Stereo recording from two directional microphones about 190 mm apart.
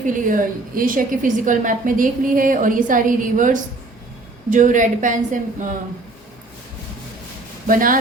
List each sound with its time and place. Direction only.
0.0 s a woman's voice: 45° right (ahead or behind)
7.7 s a woman's voice: 45° right (ahead or behind)